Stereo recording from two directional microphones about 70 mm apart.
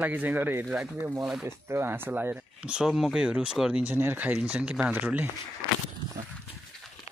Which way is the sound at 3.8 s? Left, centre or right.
Right.